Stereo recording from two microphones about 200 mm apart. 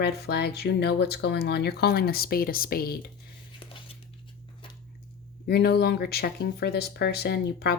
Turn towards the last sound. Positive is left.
turn(degrees=55)  # may be behind; listen again after turning